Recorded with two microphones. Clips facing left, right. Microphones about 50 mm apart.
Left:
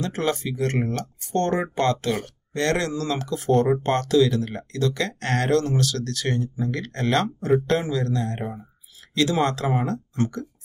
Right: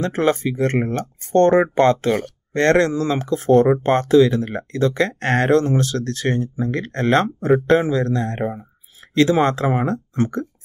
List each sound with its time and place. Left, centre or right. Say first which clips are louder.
0.0 s speech: right 6 dB; right